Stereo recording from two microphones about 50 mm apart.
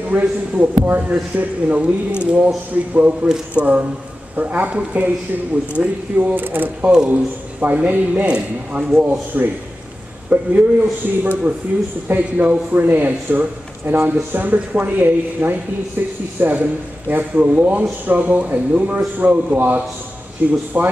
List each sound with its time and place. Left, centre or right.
0.1 s speech: right
6.8 s speech: centre
7.6 s speech: right
9.3 s speech: right
20.4 s speech: right